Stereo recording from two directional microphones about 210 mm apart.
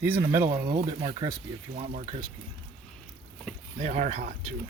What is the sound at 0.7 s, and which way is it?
Speech, 25° right (ahead or behind).